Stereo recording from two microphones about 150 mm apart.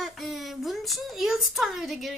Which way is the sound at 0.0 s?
Centre (ahead or behind).